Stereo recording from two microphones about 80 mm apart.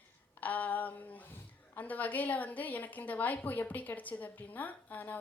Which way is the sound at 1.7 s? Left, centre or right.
Left.